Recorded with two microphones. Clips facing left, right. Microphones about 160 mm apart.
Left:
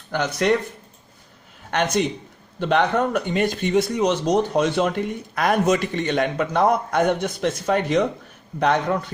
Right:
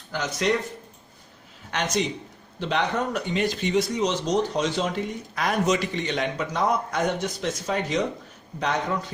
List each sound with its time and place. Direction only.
0.1 s speech: 60° left (ahead or behind)
1.7 s speech: 55° left (ahead or behind)